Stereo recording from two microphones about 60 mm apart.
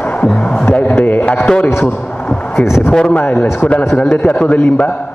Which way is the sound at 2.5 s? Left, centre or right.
Left.